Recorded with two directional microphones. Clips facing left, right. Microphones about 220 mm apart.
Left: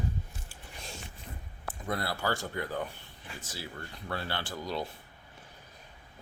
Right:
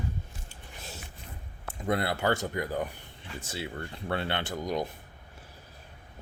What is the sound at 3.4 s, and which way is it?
Speech, 25° right (ahead or behind).